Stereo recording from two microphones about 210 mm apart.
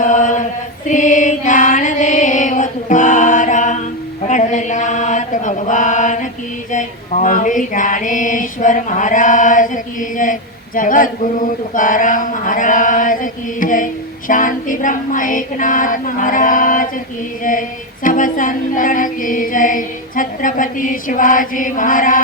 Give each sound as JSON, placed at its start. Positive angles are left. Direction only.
{"t": 0.0, "sound": "chant", "side_deg": 35}
{"t": 0.9, "sound": "mantra", "side_deg": 35}